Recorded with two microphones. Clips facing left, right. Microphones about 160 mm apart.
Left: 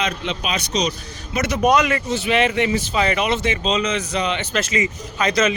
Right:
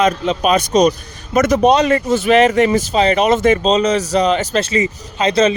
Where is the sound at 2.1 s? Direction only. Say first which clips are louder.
Right 7 dB; 45° right (ahead or behind).